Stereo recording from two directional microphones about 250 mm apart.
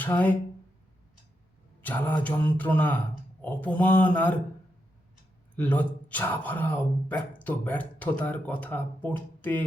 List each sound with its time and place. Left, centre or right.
0.0 s speech: centre
1.8 s speech: centre
5.5 s speech: centre